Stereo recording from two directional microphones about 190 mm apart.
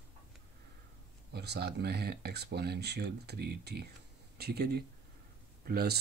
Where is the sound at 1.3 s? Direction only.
60° right (ahead or behind).